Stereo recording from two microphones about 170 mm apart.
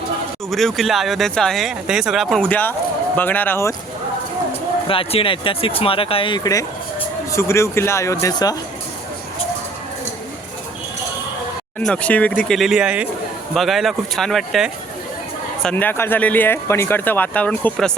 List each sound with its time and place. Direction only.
0.5 s speech: centre (ahead or behind)
4.9 s speech: 30° left (ahead or behind)
11.9 s speech: 5° left (ahead or behind)